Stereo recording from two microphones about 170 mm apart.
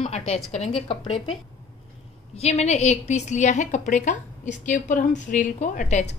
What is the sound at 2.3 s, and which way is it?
A woman's voice, 40° left (ahead or behind).